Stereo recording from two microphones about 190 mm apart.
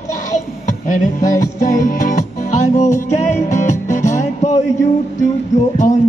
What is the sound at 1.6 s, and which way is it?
Music, 45° left (ahead or behind).